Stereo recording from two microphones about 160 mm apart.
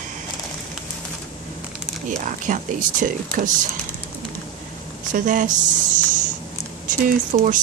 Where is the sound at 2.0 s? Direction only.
55° right (ahead or behind).